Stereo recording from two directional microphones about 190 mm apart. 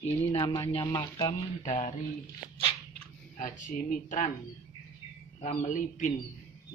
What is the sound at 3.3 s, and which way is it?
Speech, 45° left (ahead or behind).